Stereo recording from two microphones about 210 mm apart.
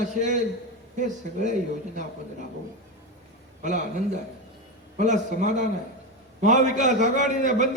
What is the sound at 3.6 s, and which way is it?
Speech, 35° right (ahead or behind).